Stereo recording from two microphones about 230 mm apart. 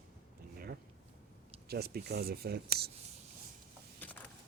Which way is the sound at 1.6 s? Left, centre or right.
Right.